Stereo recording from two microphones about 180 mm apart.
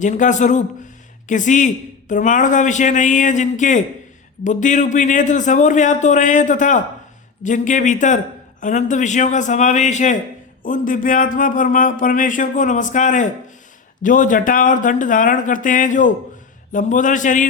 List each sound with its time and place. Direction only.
0.0 s a man's voice: 45° left (ahead or behind)